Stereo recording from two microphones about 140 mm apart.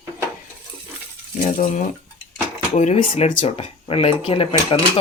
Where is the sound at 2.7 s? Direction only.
55° left (ahead or behind).